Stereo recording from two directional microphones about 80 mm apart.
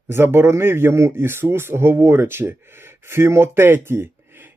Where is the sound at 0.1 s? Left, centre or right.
Right.